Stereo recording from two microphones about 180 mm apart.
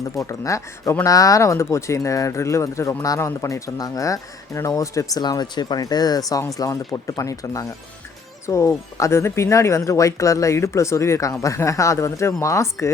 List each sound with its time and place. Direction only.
0.2 s speech: 15° left (ahead or behind)